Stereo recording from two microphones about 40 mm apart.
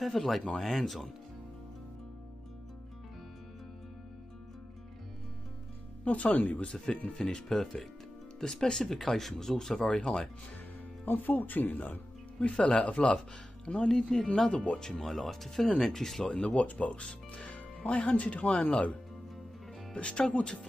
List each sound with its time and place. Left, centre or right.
0.0 s speech: centre
6.0 s speech: left
7.1 s speech: centre
11.1 s speech: left
12.4 s speech: left
14.1 s speech: centre
14.5 s speech: left
14.8 s speech: centre
16.3 s speech: left
19.9 s speech: left